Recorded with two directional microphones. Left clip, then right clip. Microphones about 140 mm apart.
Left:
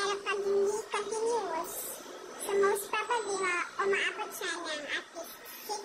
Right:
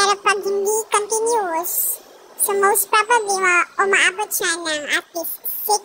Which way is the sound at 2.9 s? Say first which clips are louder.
Right 15 dB; 75° right (ahead or behind).